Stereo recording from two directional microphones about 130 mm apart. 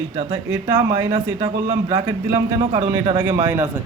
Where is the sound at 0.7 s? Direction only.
30° right (ahead or behind).